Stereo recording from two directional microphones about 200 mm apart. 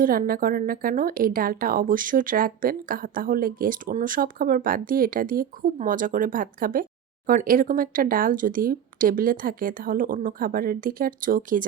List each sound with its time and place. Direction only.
0.0 s a woman's voice: 45° right (ahead or behind)